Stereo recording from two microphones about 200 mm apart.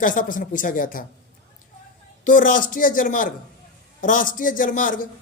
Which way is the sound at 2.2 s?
40° left (ahead or behind).